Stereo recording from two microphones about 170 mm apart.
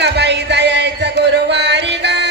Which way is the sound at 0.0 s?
90° right.